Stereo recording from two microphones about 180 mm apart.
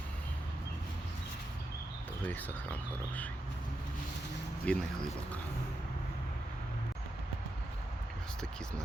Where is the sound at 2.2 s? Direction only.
10° left (ahead or behind).